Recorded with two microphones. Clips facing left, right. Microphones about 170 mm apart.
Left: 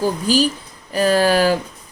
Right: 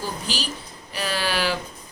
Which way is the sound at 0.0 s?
45° left (ahead or behind).